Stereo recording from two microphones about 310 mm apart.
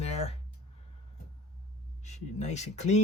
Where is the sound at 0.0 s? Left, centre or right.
Centre.